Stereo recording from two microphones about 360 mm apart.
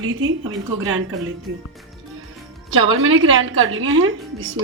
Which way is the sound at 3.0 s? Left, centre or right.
Right.